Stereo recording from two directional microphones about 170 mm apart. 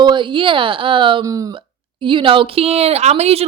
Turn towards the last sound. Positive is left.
turn(degrees=-40)  # may be behind; listen again after turning